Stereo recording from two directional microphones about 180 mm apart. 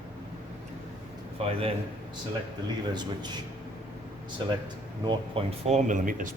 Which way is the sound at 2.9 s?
25° right (ahead or behind).